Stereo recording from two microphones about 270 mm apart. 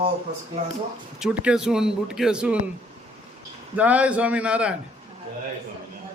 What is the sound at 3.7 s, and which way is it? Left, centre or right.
Speech, centre.